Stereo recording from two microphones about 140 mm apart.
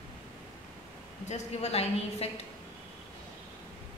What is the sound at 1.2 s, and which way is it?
A woman's voice, 50° left (ahead or behind).